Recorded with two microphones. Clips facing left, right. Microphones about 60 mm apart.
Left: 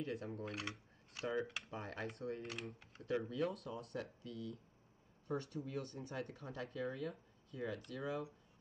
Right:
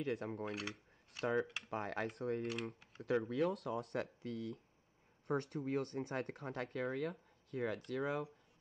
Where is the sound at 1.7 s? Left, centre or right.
Right.